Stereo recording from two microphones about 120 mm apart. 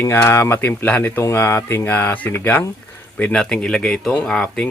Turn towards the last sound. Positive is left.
turn(degrees=5)  # may be behind; listen again after turning